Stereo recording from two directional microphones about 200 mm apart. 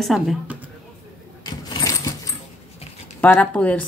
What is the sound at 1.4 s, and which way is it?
Coin, 20° left (ahead or behind).